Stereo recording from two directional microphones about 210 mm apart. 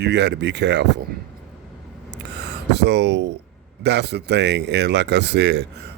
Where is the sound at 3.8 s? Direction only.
55° right (ahead or behind).